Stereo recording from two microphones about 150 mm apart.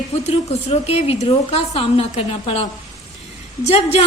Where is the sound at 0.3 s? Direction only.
45° left (ahead or behind).